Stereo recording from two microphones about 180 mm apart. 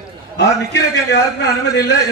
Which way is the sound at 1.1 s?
70° left (ahead or behind).